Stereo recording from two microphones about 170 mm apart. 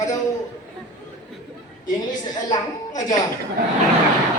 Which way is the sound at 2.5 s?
20° left (ahead or behind).